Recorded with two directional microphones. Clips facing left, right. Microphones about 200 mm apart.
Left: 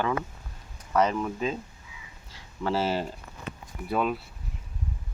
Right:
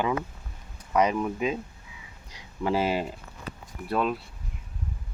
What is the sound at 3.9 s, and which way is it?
Speech, 5° left (ahead or behind).